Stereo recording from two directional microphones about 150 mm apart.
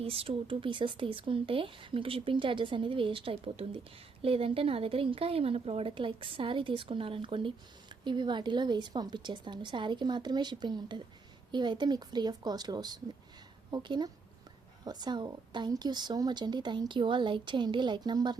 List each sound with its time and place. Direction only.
0.0 s a woman's voice: 40° right (ahead or behind)